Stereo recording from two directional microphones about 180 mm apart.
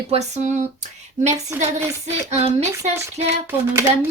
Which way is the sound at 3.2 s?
15° right (ahead or behind).